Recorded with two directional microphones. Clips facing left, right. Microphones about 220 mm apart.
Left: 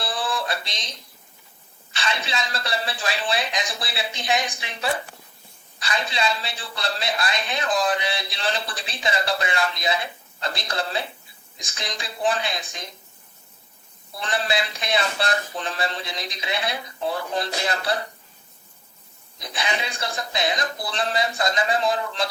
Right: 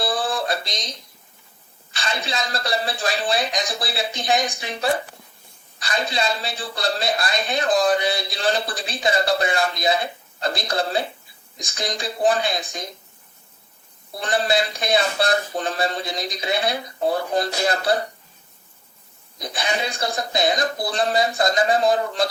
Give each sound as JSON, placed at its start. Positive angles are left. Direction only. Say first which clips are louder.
{"t": 0.0, "sound": "a sound", "louder": "right 4 dB", "side_deg": -40}
{"t": 2.0, "sound": "a man's voice", "louder": "right 1 dB", "side_deg": -40}
{"t": 14.2, "sound": "speech", "louder": "right 4 dB", "side_deg": -45}
{"t": 19.4, "sound": "speech", "louder": "right 3 dB", "side_deg": -40}